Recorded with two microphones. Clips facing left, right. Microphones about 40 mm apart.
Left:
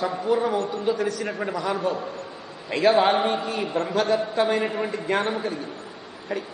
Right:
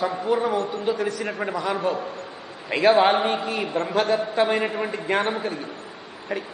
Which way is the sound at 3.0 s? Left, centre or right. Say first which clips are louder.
Right 1 dB; right.